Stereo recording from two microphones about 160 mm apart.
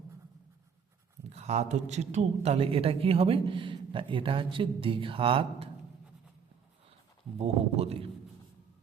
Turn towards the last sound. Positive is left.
turn(degrees=-40)  # may be behind; listen again after turning